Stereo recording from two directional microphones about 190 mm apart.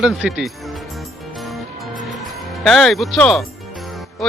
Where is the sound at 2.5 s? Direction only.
Centre (ahead or behind).